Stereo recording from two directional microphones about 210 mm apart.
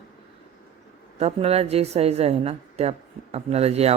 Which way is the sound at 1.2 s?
30° right (ahead or behind).